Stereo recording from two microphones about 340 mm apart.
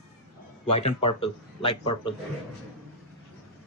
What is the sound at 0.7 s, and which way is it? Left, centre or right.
Speech, centre.